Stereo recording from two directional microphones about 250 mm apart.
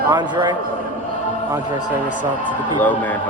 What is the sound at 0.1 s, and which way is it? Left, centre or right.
Speech, centre.